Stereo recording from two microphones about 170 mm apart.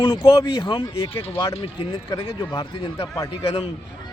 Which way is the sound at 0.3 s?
35° left (ahead or behind).